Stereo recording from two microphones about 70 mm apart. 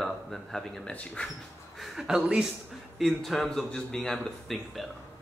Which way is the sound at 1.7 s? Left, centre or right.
Centre.